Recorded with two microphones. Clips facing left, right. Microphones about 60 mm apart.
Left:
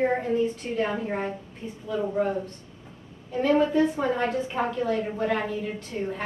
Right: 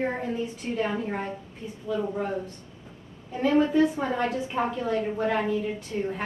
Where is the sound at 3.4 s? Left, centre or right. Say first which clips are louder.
Even; centre.